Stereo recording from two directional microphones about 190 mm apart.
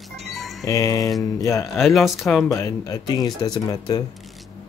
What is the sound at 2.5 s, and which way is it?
Speech, 15° left (ahead or behind).